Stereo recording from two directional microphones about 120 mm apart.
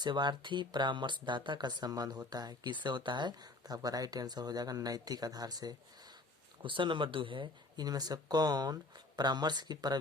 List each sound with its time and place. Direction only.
0.0 s speech: 40° right (ahead or behind)
6.6 s speech: 45° right (ahead or behind)